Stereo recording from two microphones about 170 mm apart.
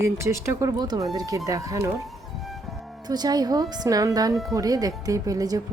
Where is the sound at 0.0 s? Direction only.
15° right (ahead or behind).